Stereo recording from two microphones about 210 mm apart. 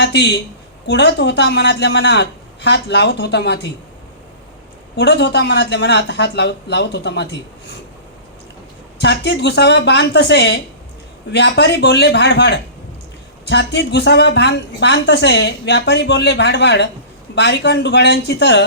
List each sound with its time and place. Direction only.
0.0 s a woman's voice: 55° left (ahead or behind)
4.9 s a woman's voice: 55° left (ahead or behind)
9.0 s a woman's voice: 55° left (ahead or behind)